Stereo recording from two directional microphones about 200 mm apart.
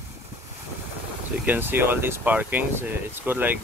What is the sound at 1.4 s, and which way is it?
Speech, 10° right (ahead or behind).